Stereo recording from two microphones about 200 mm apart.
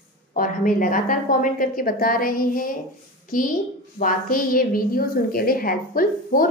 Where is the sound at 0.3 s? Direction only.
45° left (ahead or behind).